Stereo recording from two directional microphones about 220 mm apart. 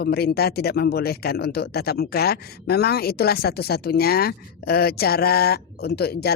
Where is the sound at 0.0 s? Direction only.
45° left (ahead or behind).